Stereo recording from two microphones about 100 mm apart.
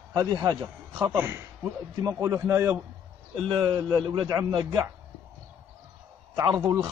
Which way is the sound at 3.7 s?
45° right (ahead or behind).